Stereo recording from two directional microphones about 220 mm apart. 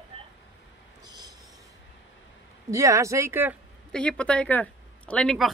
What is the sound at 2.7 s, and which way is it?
Speech, 15° right (ahead or behind).